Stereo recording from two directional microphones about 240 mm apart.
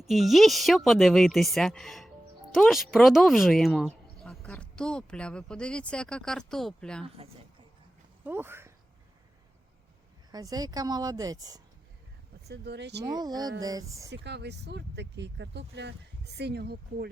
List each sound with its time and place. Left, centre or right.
0.0 s a woman's voice: centre
8.2 s speech: centre
10.3 s speech: centre
12.5 s speech: right
13.1 s speech: centre
14.1 s speech: right